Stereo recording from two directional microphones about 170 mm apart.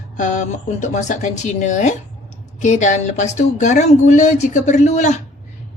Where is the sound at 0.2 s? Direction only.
50° left (ahead or behind).